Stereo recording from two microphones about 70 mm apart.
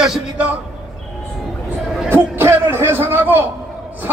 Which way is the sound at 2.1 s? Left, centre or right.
Right.